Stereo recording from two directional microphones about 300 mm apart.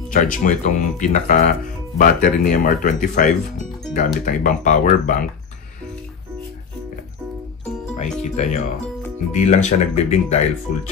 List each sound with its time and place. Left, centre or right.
0.1 s speech: left
7.9 s speech: left